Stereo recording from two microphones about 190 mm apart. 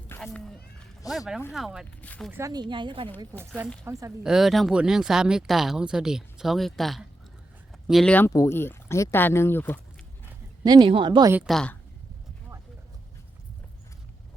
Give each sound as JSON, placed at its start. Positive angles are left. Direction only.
{"t": 0.3, "sound": "a sound", "side_deg": 5}
{"t": 1.1, "sound": "speech", "side_deg": 0}
{"t": 2.3, "sound": "speech", "side_deg": -20}
{"t": 3.2, "sound": "speech", "side_deg": -10}
{"t": 10.6, "sound": "speech", "side_deg": -20}
{"t": 11.4, "sound": "speech", "side_deg": 5}